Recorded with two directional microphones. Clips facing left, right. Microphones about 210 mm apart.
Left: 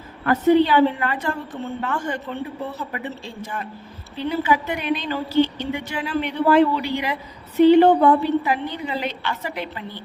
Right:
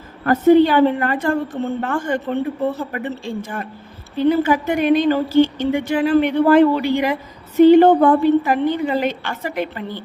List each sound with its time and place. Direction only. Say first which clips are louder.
0.3 s a woman's voice: right 4 dB; 45° right (ahead or behind)